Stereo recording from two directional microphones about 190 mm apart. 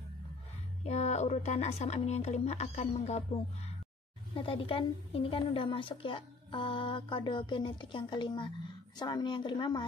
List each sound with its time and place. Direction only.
0.8 s a woman's voice: 35° left (ahead or behind)